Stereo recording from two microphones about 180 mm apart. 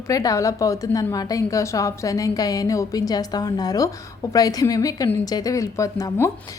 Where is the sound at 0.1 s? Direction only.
20° left (ahead or behind).